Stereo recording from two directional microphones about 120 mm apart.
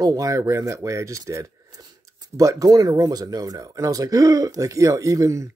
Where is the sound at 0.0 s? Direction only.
30° right (ahead or behind).